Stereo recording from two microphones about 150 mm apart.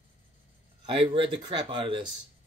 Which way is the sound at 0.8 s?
35° right (ahead or behind).